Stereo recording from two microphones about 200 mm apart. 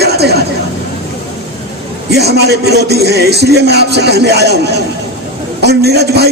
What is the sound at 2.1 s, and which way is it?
A man's voice, 55° right (ahead or behind).